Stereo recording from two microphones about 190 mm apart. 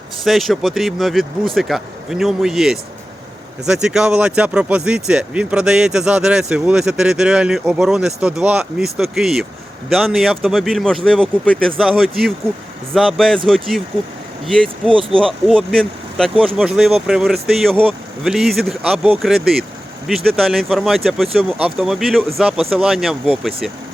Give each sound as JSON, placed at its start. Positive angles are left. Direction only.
{"t": 0.3, "sound": "speech", "side_deg": 0}
{"t": 14.8, "sound": "speech", "side_deg": -30}
{"t": 15.2, "sound": "speech", "side_deg": 0}